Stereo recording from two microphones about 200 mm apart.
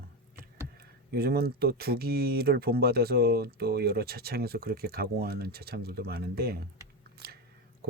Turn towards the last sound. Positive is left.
turn(degrees=-50)  # may be behind; listen again after turning